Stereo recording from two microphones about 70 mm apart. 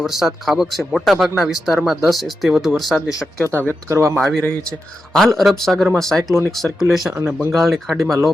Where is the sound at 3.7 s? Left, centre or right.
Right.